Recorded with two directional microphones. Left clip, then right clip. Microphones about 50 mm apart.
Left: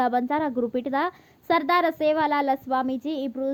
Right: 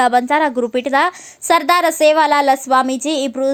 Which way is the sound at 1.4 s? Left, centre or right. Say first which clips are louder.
Right 8 dB; right.